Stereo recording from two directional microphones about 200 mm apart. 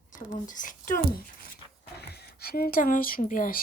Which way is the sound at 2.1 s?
50° left (ahead or behind).